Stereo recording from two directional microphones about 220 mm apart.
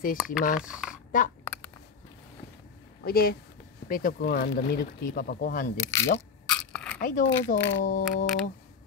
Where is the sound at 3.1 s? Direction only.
45° left (ahead or behind).